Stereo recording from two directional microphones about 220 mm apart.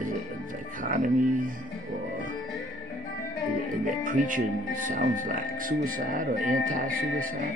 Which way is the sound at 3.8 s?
40° right (ahead or behind).